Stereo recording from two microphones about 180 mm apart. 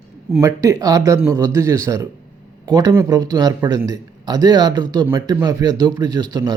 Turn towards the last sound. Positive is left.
turn(degrees=-20)  # may be behind; listen again after turning